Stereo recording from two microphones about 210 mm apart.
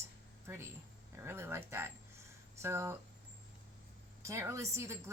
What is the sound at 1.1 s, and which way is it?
Speech, 10° right (ahead or behind).